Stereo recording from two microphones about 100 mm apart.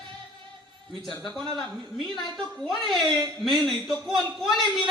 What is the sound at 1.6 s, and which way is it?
A woman's voice, 5° left (ahead or behind).